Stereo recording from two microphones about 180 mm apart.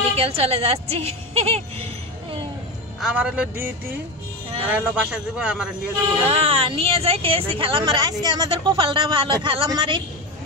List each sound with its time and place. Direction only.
0.1 s speech: 35° right (ahead or behind)
3.0 s a man's voice: 5° right (ahead or behind)
6.2 s speech: 35° right (ahead or behind)